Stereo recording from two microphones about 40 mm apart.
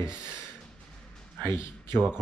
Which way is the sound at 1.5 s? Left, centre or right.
Right.